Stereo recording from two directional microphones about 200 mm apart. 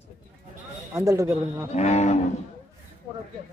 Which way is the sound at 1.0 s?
15° right (ahead or behind).